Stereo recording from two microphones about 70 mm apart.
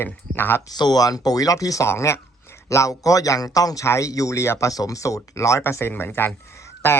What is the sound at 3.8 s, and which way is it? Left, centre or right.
Speech, left.